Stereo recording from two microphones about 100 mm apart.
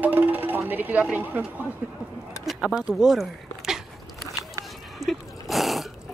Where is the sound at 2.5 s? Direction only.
5° right (ahead or behind).